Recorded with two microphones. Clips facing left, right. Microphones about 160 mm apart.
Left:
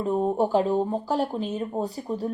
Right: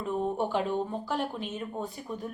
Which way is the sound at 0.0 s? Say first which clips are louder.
Left 6 dB; 40° left (ahead or behind).